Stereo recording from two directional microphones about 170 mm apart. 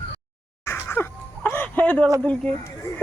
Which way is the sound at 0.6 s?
15° left (ahead or behind).